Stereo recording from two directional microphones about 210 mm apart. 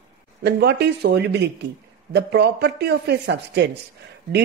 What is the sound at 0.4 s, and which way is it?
Speech, 50° right (ahead or behind).